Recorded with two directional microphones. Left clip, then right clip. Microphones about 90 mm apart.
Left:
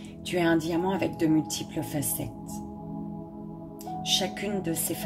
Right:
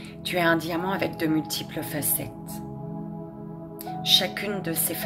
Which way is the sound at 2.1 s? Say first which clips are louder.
Right 1 dB; 45° right (ahead or behind).